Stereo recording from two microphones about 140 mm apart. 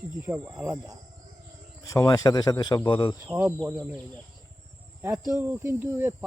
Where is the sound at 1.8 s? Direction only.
25° left (ahead or behind).